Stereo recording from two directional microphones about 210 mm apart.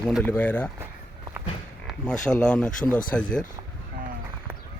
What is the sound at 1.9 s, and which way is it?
Speech, 5° left (ahead or behind).